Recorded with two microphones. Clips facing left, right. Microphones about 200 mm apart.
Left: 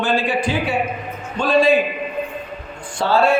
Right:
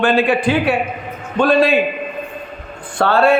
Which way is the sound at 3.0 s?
60° right (ahead or behind).